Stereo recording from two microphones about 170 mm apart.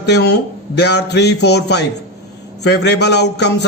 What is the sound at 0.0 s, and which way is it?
A man's voice, 75° left (ahead or behind).